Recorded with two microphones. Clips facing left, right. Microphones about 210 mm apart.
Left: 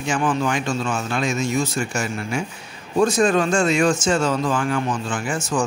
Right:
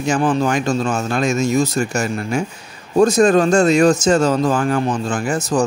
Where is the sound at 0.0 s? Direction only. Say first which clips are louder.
Right 5 dB; 40° right (ahead or behind).